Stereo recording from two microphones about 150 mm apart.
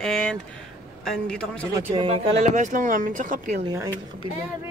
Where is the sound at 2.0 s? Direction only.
45° right (ahead or behind); by 3.6 s 60° right (ahead or behind).